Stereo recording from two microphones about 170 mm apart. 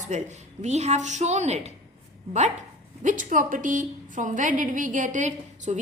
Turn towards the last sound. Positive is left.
turn(degrees=-45)  # may be behind; listen again after turning